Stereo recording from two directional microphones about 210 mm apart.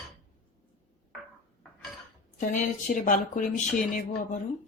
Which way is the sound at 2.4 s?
40° left (ahead or behind).